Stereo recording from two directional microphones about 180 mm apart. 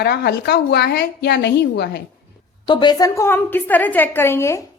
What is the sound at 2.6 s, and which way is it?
A woman's voice, 25° left (ahead or behind).